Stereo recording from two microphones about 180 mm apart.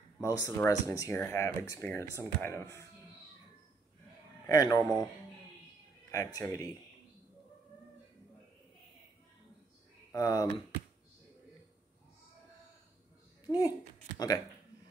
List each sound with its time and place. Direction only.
0.2 s speech: 15° left (ahead or behind)
4.5 s speech: 20° left (ahead or behind)
6.1 s speech: 15° left (ahead or behind)
10.1 s speech: 20° left (ahead or behind)
13.5 s speech: 20° left (ahead or behind)